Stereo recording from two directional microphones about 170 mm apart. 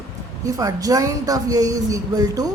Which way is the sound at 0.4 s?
20° right (ahead or behind).